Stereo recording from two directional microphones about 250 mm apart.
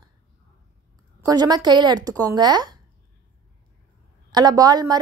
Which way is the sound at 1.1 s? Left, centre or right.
Centre.